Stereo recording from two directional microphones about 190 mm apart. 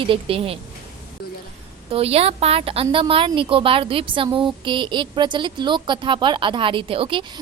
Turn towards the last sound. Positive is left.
turn(degrees=-25)  # may be behind; listen again after turning